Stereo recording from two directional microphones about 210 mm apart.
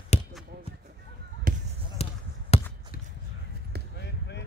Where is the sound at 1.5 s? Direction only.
40° right (ahead or behind).